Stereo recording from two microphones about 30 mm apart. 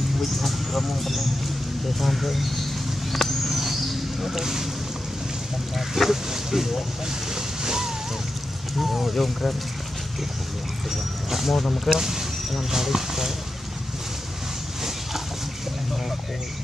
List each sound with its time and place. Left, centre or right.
0.4 s speech: centre
3.1 s a sound: centre
4.4 s speech: centre
6.0 s speech: centre
7.3 s boat: centre
8.8 s speech: centre
11.2 s speech: centre